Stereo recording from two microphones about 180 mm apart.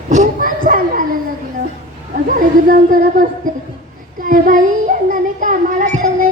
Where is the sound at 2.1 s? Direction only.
50° right (ahead or behind).